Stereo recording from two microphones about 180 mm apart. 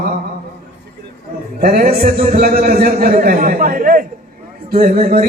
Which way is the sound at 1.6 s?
50° right (ahead or behind).